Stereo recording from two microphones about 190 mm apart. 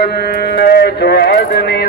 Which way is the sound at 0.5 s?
60° left (ahead or behind).